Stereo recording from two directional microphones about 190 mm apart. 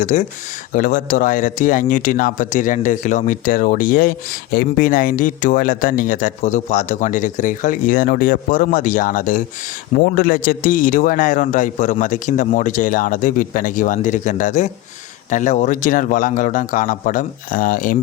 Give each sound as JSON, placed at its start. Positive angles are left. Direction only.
{"t": 0.0, "sound": "speech", "side_deg": 40}